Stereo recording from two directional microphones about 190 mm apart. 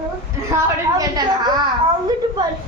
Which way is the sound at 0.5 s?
20° right (ahead or behind).